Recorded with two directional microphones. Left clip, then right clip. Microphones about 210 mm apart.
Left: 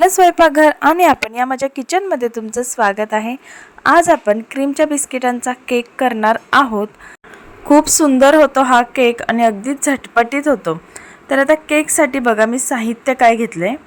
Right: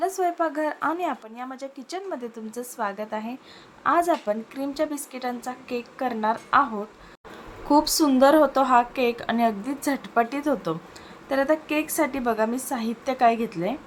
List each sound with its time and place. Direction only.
0.0 s speech: 40° left (ahead or behind)
7.7 s a woman's voice: 25° left (ahead or behind)